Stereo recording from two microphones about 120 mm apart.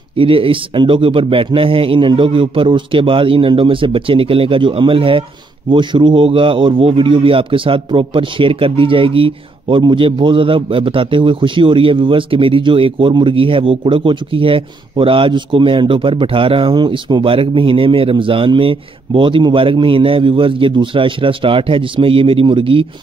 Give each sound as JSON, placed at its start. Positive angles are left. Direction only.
{"t": 0.2, "sound": "a man's voice", "side_deg": -50}